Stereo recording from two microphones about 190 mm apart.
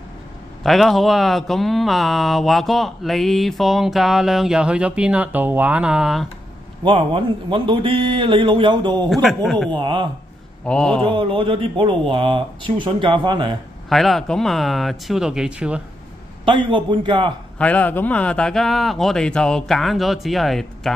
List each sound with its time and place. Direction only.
0.7 s speech: centre (ahead or behind)
6.8 s speech: 25° right (ahead or behind)
9.1 s speech: centre (ahead or behind)
9.7 s speech: 25° right (ahead or behind)
10.6 s speech: 5° left (ahead or behind)
11.1 s speech: 30° right (ahead or behind)
13.8 s speech: centre (ahead or behind)
16.4 s speech: 25° right (ahead or behind)
17.6 s speech: 5° left (ahead or behind)